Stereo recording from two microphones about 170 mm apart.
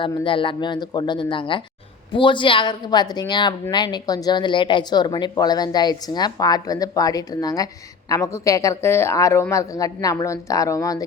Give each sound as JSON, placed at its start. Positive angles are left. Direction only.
{"t": 0.3, "sound": "a woman's voice", "side_deg": 30}